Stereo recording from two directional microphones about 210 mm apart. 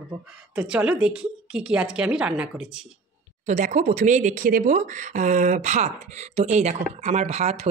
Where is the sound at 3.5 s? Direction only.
35° right (ahead or behind).